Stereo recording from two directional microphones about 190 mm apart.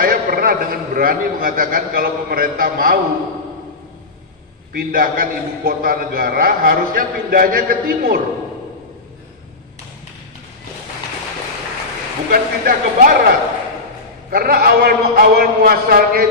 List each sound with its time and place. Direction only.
0.0 s a man's voice: 50° right (ahead or behind)
4.7 s a man's voice: 50° right (ahead or behind)
12.3 s a man's voice: 50° right (ahead or behind)
14.3 s a man's voice: 50° right (ahead or behind)